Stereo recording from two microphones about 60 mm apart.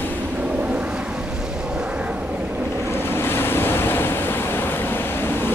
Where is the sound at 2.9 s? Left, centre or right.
Left.